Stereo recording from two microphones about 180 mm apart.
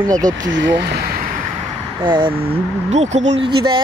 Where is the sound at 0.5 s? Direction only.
85° right.